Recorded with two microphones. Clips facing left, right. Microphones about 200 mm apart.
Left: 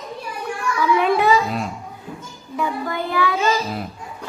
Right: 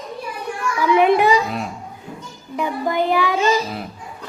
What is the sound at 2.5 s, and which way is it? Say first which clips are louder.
Child singing: right 3 dB; 20° right (ahead or behind).